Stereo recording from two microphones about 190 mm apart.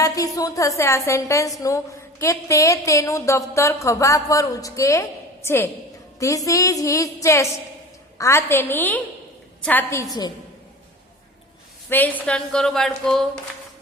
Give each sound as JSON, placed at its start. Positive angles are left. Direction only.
{"t": 0.0, "sound": "a woman's voice", "side_deg": 20}
{"t": 11.9, "sound": "a woman's voice", "side_deg": 10}